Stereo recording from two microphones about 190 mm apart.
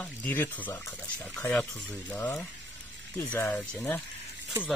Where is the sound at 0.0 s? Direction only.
10° left (ahead or behind).